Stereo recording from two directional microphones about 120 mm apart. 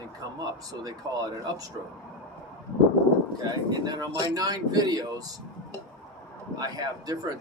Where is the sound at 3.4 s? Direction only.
35° right (ahead or behind).